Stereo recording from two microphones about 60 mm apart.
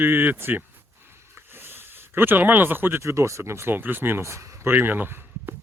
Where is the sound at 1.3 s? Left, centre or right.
Right.